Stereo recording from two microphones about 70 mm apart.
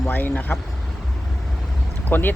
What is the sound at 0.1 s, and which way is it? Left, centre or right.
Speech, left.